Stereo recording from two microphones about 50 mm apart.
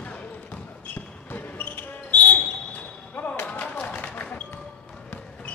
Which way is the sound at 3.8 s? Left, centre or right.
Left.